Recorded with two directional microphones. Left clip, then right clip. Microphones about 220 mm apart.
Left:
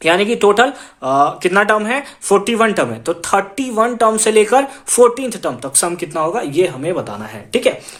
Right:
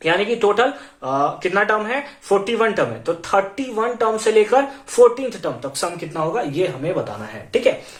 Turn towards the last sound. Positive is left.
turn(degrees=45)  # may be behind; listen again after turning